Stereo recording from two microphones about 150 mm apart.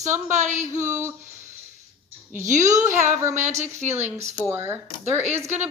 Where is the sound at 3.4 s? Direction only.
50° right (ahead or behind).